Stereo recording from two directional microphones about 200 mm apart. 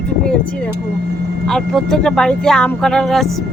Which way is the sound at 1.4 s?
5° left (ahead or behind).